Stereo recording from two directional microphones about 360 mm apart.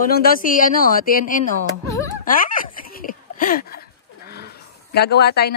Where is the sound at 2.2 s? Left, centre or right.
Left.